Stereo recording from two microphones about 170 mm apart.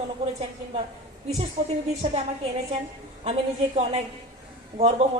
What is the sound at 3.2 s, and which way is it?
Speech, 35° right (ahead or behind).